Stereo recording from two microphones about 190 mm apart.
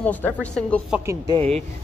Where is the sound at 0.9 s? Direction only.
15° right (ahead or behind).